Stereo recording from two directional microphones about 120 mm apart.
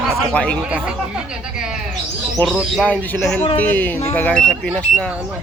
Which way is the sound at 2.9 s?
15° left (ahead or behind).